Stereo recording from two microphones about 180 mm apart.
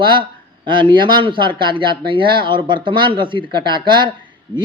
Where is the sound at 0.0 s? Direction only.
25° right (ahead or behind).